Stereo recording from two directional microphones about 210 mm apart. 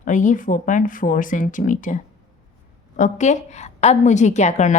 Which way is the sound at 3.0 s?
35° left (ahead or behind).